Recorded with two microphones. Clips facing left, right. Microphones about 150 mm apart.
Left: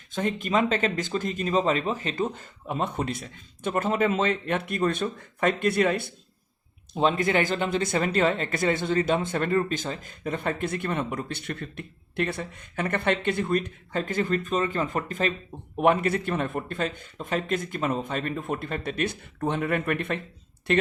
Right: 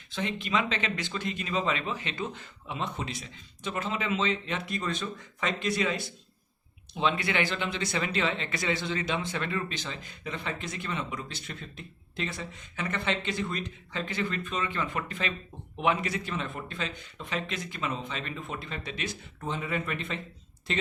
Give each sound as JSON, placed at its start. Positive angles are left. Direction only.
{"t": 0.1, "sound": "speech", "side_deg": 50}
{"t": 6.9, "sound": "speech", "side_deg": 40}